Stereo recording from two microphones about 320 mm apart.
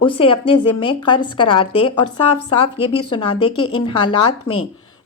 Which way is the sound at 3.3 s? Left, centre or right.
Left.